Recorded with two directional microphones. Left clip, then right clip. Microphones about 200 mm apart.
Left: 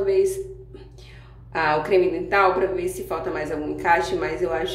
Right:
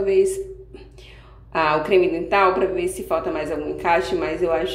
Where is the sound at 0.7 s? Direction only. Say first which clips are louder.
Right 2 dB; 15° right (ahead or behind).